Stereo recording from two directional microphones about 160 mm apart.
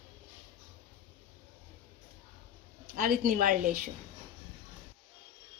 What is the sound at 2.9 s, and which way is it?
A woman's voice, 70° right (ahead or behind).